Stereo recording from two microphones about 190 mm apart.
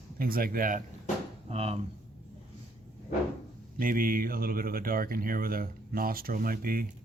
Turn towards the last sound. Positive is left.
turn(degrees=-50)  # may be behind; listen again after turning